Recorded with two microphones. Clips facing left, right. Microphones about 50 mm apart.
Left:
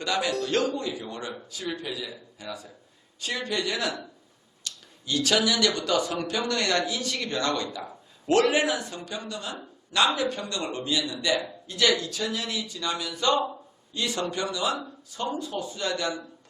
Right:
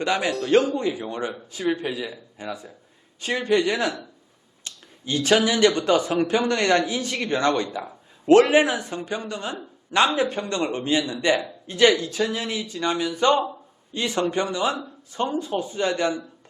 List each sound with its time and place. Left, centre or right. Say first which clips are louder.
0.0 s speech: right 4 dB; right
0.3 s speech: right 2 dB; centre
0.8 s a man's voice: right 7 dB; right